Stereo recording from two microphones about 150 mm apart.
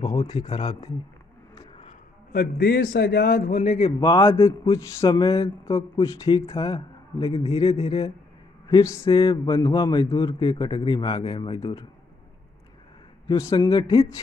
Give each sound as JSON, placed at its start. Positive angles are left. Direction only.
{"t": 0.0, "sound": "a man's voice", "side_deg": 25}
{"t": 0.5, "sound": "a man's voice", "side_deg": 45}
{"t": 2.3, "sound": "a man's voice", "side_deg": 90}
{"t": 3.4, "sound": "a man's voice", "side_deg": 55}
{"t": 4.0, "sound": "a man's voice", "side_deg": 25}
{"t": 7.3, "sound": "a man's voice", "side_deg": 40}
{"t": 8.6, "sound": "a man's voice", "side_deg": 20}
{"t": 9.1, "sound": "a man's voice", "side_deg": 35}
{"t": 13.3, "sound": "a man's voice", "side_deg": 25}
{"t": 13.7, "sound": "a man's voice", "side_deg": 35}